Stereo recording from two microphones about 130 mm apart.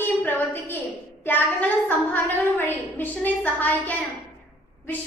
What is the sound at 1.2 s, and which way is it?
A woman's voice, 15° left (ahead or behind).